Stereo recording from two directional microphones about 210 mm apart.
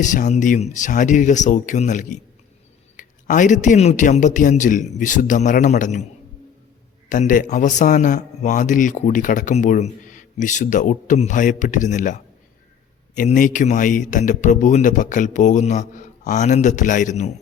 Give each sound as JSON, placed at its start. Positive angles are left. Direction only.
{"t": 0.0, "sound": "a man's voice", "side_deg": 35}
{"t": 7.1, "sound": "a man's voice", "side_deg": 40}